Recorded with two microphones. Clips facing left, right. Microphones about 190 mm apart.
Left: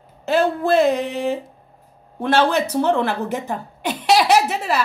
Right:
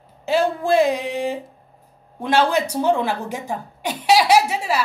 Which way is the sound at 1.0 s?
55° left (ahead or behind).